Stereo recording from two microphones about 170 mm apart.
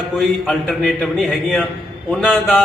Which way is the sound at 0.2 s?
Centre (ahead or behind).